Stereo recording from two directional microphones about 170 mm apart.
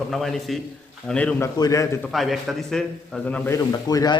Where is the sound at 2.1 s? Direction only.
Centre (ahead or behind).